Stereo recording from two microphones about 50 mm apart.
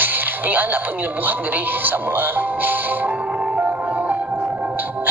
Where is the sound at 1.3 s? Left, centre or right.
Right.